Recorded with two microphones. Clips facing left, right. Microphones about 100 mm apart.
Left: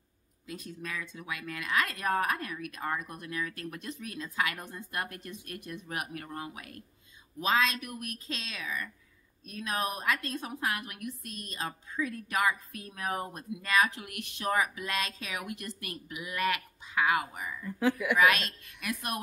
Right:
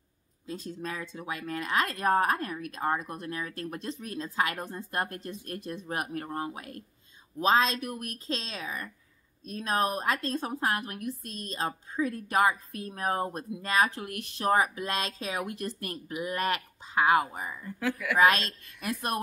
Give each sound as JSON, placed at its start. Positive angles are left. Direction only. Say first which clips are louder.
{"t": 0.5, "sound": "a woman's voice", "louder": "right 4 dB", "side_deg": -30}
{"t": 17.7, "sound": "a woman's voice", "louder": "left 3 dB", "side_deg": 20}
{"t": 18.1, "sound": "a woman's voice", "louder": "right 6 dB", "side_deg": -35}